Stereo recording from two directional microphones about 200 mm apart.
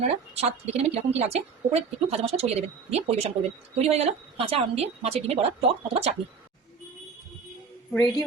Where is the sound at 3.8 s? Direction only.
30° right (ahead or behind).